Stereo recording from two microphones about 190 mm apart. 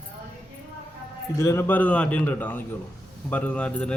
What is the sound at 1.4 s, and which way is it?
A man's voice, 15° left (ahead or behind).